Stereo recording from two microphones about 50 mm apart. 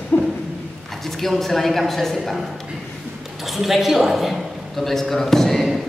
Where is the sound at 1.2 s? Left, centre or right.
Centre.